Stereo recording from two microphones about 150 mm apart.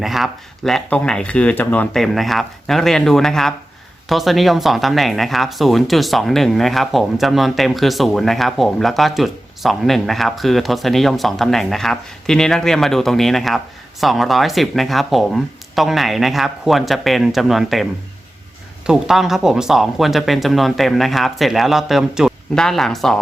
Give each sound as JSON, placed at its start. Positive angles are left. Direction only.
{"t": 0.0, "sound": "speech", "side_deg": 0}
{"t": 18.9, "sound": "speech", "side_deg": -5}